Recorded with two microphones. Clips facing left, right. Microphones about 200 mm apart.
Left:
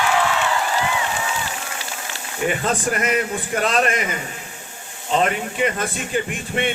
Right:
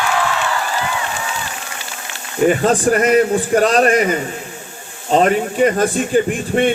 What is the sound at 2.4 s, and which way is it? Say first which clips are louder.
A man's voice: right 8 dB; 35° right (ahead or behind).